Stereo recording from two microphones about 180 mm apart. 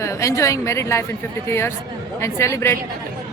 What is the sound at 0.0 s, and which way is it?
A woman's voice, 15° left (ahead or behind).